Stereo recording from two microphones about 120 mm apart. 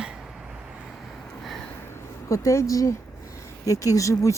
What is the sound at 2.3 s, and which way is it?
Speech, 25° left (ahead or behind).